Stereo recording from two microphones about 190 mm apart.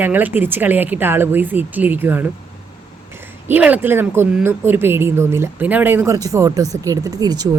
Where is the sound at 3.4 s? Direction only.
10° right (ahead or behind).